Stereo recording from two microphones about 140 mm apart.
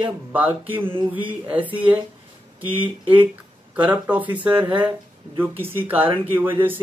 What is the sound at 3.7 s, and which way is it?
Speech, 10° right (ahead or behind).